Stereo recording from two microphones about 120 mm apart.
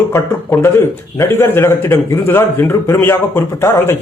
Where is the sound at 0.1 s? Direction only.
20° left (ahead or behind).